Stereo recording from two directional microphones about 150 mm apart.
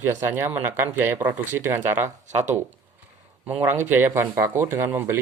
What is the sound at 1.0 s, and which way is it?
Speech, 15° right (ahead or behind).